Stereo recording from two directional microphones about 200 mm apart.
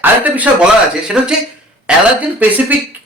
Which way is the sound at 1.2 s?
5° right (ahead or behind).